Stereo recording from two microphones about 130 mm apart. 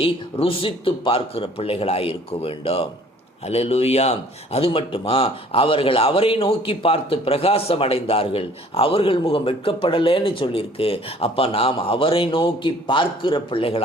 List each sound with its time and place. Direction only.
0.0 s speech: 45° left (ahead or behind)